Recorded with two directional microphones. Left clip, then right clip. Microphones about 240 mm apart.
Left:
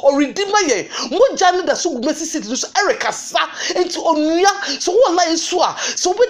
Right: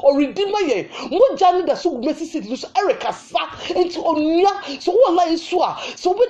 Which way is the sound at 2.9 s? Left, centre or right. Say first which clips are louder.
Left 2 dB; left.